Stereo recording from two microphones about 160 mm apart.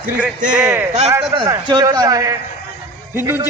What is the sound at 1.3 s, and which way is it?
A man's voice, 30° right (ahead or behind).